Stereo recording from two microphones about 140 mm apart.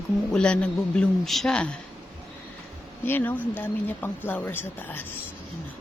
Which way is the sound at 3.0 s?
15° left (ahead or behind).